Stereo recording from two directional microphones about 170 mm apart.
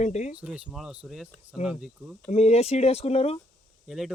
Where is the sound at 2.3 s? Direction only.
40° left (ahead or behind).